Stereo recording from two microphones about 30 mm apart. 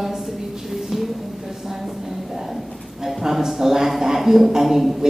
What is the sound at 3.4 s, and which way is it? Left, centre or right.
A woman's voice, centre.